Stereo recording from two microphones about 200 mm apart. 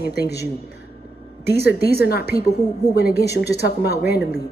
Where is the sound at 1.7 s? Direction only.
50° left (ahead or behind).